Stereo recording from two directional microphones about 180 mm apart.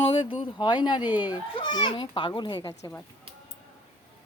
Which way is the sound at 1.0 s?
10° right (ahead or behind).